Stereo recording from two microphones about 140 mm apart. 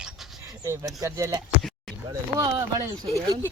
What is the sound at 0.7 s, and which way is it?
Speech, 25° right (ahead or behind).